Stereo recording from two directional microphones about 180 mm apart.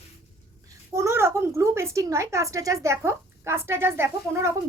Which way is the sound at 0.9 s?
15° right (ahead or behind).